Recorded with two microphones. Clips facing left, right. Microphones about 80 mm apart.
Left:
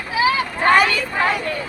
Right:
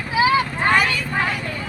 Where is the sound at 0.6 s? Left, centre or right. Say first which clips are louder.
Left 6 dB; left.